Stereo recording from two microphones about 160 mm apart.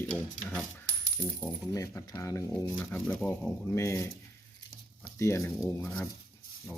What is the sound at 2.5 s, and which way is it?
Speech, 5° left (ahead or behind).